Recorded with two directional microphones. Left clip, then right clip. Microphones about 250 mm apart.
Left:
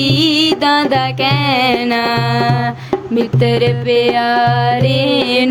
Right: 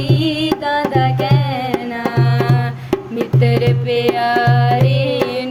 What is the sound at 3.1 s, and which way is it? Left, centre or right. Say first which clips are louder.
Music: left 5 dB; left.